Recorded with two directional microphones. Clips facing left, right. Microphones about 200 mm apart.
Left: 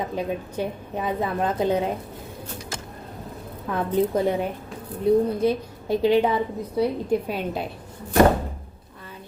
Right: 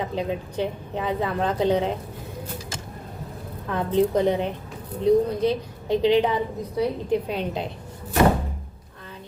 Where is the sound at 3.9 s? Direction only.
10° left (ahead or behind).